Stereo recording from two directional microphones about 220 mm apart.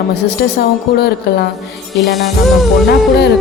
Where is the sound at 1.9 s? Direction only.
Centre (ahead or behind).